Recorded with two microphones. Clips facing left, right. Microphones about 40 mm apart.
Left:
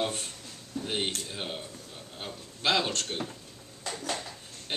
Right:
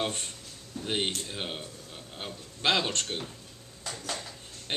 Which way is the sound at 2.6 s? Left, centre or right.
Right.